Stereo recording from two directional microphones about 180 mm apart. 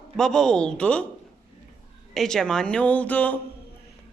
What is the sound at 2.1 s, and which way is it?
Speech, centre (ahead or behind).